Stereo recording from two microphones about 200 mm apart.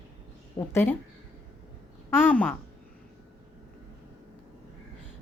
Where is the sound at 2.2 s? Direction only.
10° left (ahead or behind).